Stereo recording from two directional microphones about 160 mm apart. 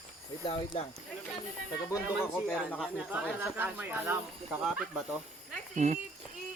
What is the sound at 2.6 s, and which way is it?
Speech, 10° left (ahead or behind).